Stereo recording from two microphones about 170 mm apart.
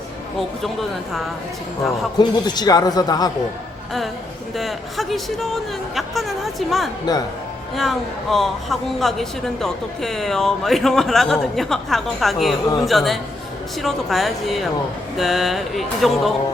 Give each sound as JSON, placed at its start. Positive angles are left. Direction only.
{"t": 0.6, "sound": "a woman's voice", "side_deg": 0}
{"t": 2.1, "sound": "a man's voice", "side_deg": 25}
{"t": 4.5, "sound": "a woman's voice", "side_deg": 0}